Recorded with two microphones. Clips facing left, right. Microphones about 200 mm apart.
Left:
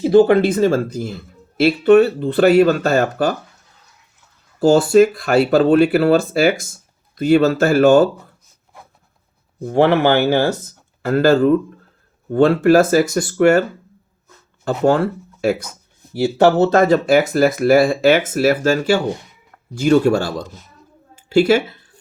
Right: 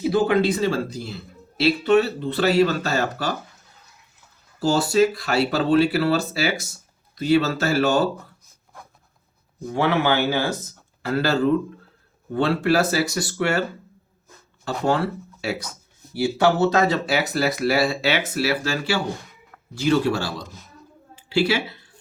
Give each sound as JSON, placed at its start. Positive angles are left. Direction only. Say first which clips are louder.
{"t": 0.0, "sound": "speech", "louder": "left 8 dB", "side_deg": 55}
{"t": 4.6, "sound": "speech", "louder": "left 7 dB", "side_deg": 50}
{"t": 9.6, "sound": "speech", "louder": "left 7 dB", "side_deg": 55}
{"t": 16.7, "sound": "a woman's voice", "louder": "left 8 dB", "side_deg": 50}